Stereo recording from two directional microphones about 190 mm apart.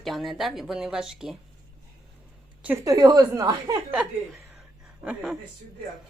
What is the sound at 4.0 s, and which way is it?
Chuckle, 5° right (ahead or behind).